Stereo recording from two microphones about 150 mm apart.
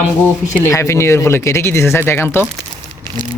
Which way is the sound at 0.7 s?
20° left (ahead or behind).